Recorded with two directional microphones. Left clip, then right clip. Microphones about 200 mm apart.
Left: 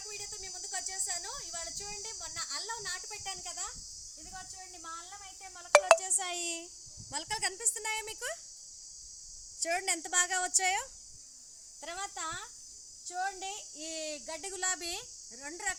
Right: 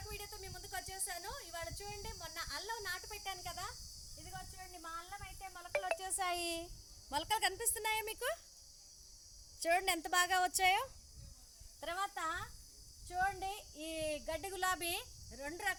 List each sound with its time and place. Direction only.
0.1 s cricket: 10° right (ahead or behind)
6.0 s a woman's voice: 25° right (ahead or behind)
9.6 s a woman's voice: 40° right (ahead or behind)
11.8 s speech: 15° right (ahead or behind); by 15.7 s 30° right (ahead or behind)